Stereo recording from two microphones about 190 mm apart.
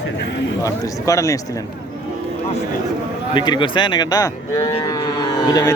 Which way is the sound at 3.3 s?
25° left (ahead or behind).